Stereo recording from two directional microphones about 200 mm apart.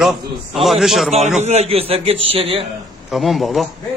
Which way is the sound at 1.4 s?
30° right (ahead or behind).